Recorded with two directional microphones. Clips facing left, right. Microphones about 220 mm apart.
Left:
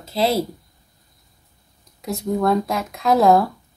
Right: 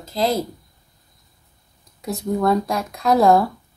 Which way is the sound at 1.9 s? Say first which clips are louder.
Even; centre (ahead or behind).